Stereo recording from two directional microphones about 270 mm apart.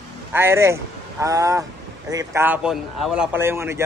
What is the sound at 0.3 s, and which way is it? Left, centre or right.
A man's voice, centre.